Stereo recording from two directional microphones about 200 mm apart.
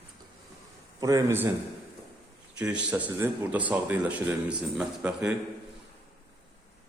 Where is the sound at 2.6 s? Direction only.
5° right (ahead or behind).